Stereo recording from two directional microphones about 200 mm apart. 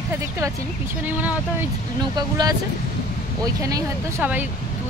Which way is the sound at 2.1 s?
20° right (ahead or behind).